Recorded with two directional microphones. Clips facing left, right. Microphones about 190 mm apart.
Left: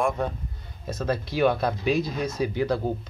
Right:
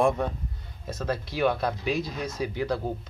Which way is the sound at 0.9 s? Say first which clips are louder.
Left 4 dB; 35° left (ahead or behind).